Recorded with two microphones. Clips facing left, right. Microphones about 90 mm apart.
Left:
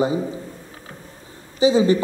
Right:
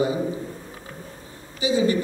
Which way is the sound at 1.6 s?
30° left (ahead or behind).